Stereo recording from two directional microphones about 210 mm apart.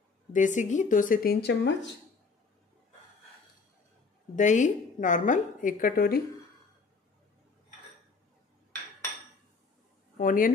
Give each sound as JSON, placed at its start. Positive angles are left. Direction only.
{"t": 0.3, "sound": "a woman's voice", "side_deg": 35}
{"t": 4.4, "sound": "a woman's voice", "side_deg": 35}
{"t": 10.1, "sound": "speech", "side_deg": 40}